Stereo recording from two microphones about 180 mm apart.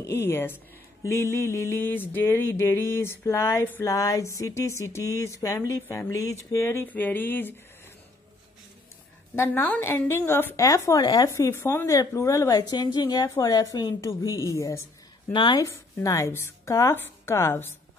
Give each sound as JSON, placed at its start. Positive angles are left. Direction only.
{"t": 0.0, "sound": "a woman's voice", "side_deg": 15}
{"t": 9.3, "sound": "a woman's voice", "side_deg": 10}